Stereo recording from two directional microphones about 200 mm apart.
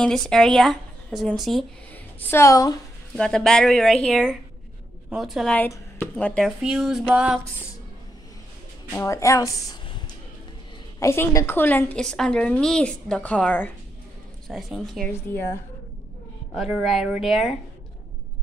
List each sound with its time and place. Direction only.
0.0 s a woman's voice: centre (ahead or behind)
2.3 s a woman's voice: 15° left (ahead or behind)
3.2 s a woman's voice: 5° left (ahead or behind)
8.9 s a woman's voice: 15° left (ahead or behind)
11.0 s a woman's voice: 15° left (ahead or behind)
16.5 s a woman's voice: centre (ahead or behind)